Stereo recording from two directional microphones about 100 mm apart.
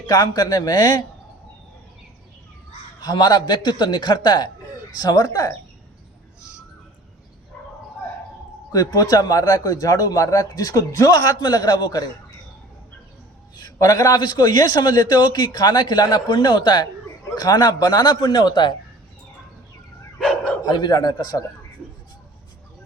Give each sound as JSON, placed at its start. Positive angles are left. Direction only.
{"t": 0.1, "sound": "a man's voice", "side_deg": 45}
{"t": 3.0, "sound": "a man's voice", "side_deg": 45}
{"t": 8.7, "sound": "speech", "side_deg": 40}
{"t": 13.6, "sound": "a man's voice", "side_deg": 40}
{"t": 20.1, "sound": "dog", "side_deg": 5}
{"t": 20.6, "sound": "a man's voice", "side_deg": 45}